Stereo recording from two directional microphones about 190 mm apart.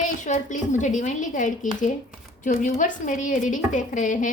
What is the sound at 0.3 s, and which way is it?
A woman's voice, 40° left (ahead or behind).